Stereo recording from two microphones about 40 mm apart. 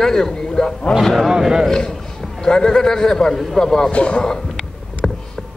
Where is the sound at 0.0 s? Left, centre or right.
Centre.